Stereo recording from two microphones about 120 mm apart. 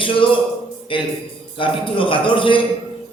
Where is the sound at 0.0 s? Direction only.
45° left (ahead or behind).